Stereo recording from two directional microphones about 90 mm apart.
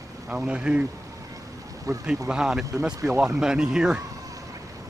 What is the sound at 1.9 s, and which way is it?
Speech, 35° right (ahead or behind).